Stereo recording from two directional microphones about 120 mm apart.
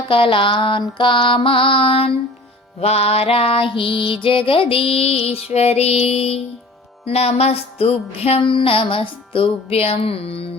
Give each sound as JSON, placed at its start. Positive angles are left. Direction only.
{"t": 0.1, "sound": "music", "side_deg": 45}